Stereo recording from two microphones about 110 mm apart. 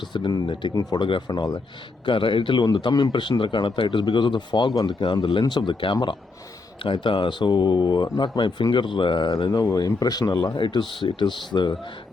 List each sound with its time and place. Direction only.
0.1 s speech: 40° left (ahead or behind)
0.7 s speech: 35° left (ahead or behind)
2.0 s speech: 50° left (ahead or behind)